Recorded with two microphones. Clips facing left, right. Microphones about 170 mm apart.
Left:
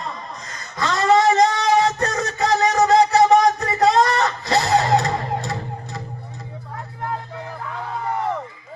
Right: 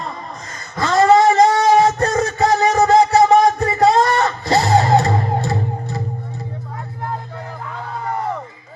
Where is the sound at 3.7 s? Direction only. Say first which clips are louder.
Right 2 dB; 30° right (ahead or behind).